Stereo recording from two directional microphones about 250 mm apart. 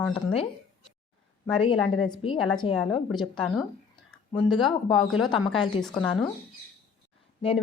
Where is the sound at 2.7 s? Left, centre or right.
Centre.